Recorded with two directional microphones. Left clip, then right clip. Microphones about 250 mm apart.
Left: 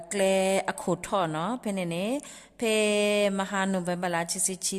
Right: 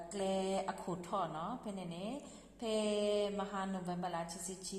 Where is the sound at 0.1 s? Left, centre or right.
Left.